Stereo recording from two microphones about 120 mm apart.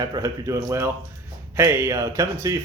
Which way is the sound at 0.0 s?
30° right (ahead or behind).